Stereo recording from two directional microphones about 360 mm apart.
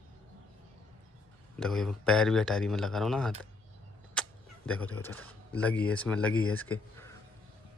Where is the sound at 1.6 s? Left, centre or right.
Centre.